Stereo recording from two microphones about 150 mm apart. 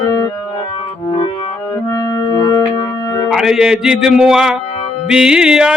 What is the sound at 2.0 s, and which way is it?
Music, 30° left (ahead or behind).